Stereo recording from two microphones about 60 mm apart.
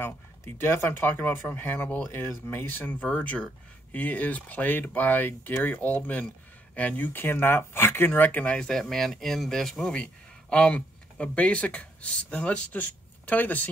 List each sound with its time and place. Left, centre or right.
0.0 s speech: left
2.0 s speech: left
3.1 s speech: left
8.5 s speech: centre
10.5 s speech: centre